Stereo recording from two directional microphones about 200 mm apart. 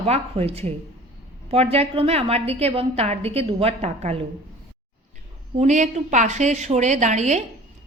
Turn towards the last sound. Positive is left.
turn(degrees=-35)  # may be behind; listen again after turning